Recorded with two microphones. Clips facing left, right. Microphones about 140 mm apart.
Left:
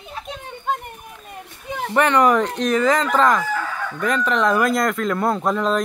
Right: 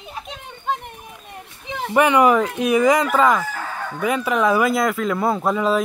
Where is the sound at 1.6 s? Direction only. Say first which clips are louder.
Left 1 dB; centre (ahead or behind).